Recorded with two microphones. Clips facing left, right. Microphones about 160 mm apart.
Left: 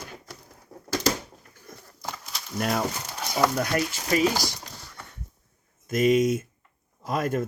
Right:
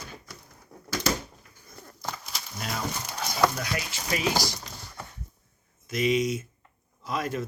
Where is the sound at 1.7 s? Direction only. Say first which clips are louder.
Left 3 dB; 90° left.